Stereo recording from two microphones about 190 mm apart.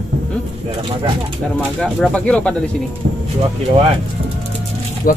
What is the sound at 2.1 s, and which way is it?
Speech, 5° left (ahead or behind).